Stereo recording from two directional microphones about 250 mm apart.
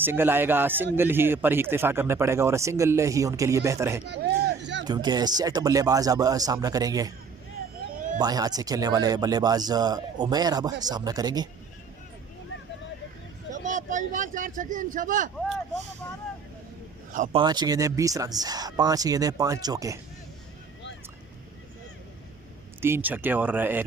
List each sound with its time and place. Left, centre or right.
0.0 s a man's voice: centre
4.0 s a sound: right
4.9 s a man's voice: centre
7.8 s a sound: left
8.2 s a man's voice: centre
13.5 s speech: right
17.1 s a man's voice: right
17.4 s a man's voice: centre
22.8 s a man's voice: centre